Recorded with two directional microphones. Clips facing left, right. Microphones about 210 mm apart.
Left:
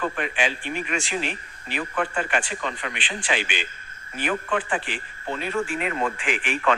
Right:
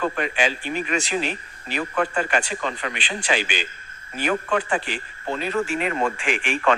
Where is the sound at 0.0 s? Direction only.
40° right (ahead or behind).